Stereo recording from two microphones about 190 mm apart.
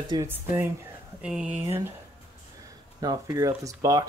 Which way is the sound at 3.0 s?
20° right (ahead or behind).